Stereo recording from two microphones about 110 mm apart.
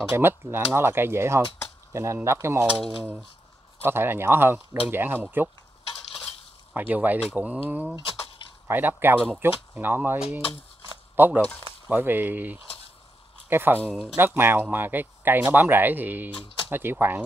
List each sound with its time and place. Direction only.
0.1 s speech: 20° right (ahead or behind)
3.8 s speech: 20° right (ahead or behind)
6.7 s speech: 15° right (ahead or behind)
11.1 s speech: 20° right (ahead or behind)